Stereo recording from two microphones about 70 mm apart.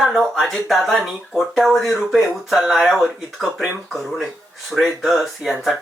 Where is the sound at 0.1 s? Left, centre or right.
Centre.